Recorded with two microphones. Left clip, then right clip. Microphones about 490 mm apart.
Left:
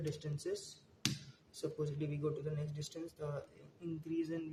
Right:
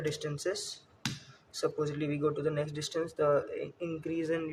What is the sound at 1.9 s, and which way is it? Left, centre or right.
Speech, centre.